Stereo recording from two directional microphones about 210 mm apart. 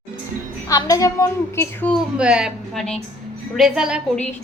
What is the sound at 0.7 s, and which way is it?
A woman's voice, 15° left (ahead or behind).